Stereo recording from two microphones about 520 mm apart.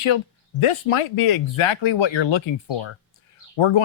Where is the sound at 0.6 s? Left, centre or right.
Left.